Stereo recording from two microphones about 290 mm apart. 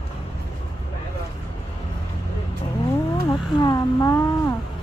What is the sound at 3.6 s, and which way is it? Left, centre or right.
Speech, centre.